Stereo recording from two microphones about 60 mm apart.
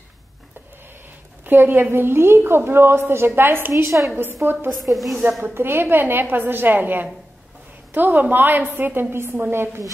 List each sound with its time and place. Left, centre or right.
1.4 s a woman's voice: right
4.8 s a woman's voice: centre
5.4 s a woman's voice: right